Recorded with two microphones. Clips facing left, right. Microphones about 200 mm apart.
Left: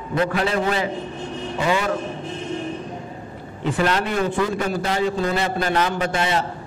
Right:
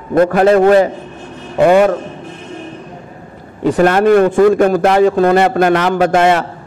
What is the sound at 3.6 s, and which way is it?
A man's voice, 45° right (ahead or behind).